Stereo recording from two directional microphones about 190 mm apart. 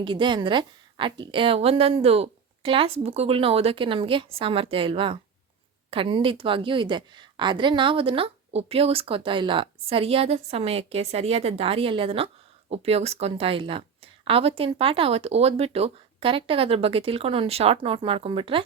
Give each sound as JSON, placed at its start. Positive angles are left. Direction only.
{"t": 0.0, "sound": "a woman's voice", "side_deg": -25}